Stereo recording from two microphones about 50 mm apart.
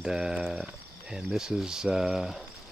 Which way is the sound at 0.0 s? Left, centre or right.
Centre.